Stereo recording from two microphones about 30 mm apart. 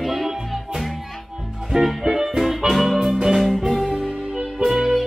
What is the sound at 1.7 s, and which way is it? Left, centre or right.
Music, right.